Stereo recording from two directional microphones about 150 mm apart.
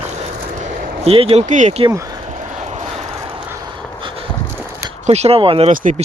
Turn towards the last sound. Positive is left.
turn(degrees=-65)  # may be behind; listen again after turning